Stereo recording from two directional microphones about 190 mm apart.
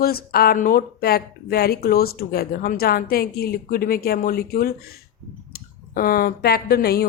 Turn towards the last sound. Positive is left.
turn(degrees=55)  # may be behind; listen again after turning